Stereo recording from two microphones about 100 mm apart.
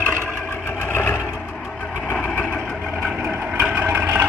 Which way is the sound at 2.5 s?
5° left (ahead or behind).